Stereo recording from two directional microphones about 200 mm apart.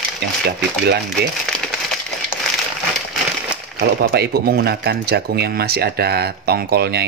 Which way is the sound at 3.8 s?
55° right (ahead or behind).